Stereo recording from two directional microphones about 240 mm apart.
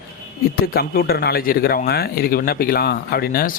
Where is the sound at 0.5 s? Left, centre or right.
Left.